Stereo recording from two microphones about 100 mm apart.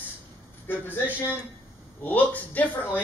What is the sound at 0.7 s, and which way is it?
Speech, 20° left (ahead or behind).